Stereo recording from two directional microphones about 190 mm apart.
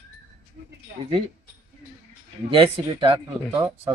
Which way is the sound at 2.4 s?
25° right (ahead or behind).